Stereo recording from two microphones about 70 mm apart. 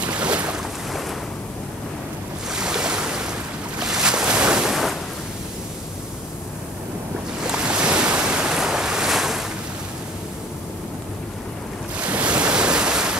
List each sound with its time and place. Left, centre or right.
0.0 s boat: centre
2.5 s waves: centre
3.8 s boat: centre
7.4 s waves: centre
12.0 s waves: centre